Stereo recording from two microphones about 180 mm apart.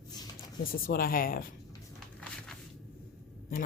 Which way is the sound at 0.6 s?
55° left (ahead or behind).